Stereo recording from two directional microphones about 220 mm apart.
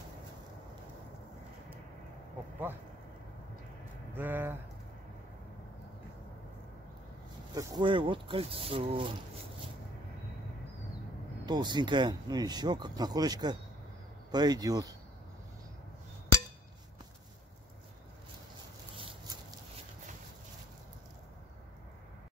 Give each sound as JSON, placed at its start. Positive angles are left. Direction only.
{"t": 4.1, "sound": "speech", "side_deg": -10}
{"t": 7.5, "sound": "speech", "side_deg": -20}
{"t": 11.4, "sound": "speech", "side_deg": -20}